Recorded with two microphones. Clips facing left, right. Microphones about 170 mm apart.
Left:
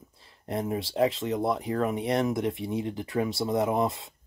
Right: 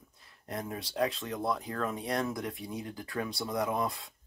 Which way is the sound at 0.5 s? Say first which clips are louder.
Left 8 dB; 25° left (ahead or behind).